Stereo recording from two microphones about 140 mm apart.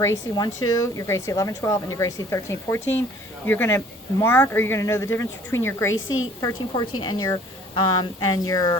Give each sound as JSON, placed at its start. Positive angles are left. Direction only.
{"t": 0.0, "sound": "a woman's voice", "side_deg": 25}
{"t": 6.4, "sound": "a woman's voice", "side_deg": 30}